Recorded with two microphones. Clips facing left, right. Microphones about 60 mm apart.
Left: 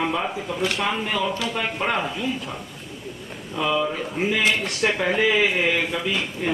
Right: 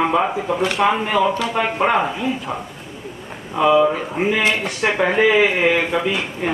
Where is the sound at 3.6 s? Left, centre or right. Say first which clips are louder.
Right 9 dB; centre.